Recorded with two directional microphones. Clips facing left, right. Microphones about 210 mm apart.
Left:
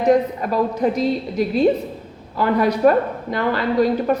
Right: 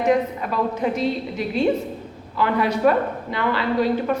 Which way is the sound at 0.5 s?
40° left (ahead or behind).